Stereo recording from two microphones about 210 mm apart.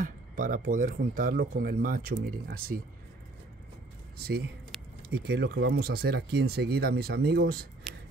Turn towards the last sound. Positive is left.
turn(degrees=-50)  # may be behind; listen again after turning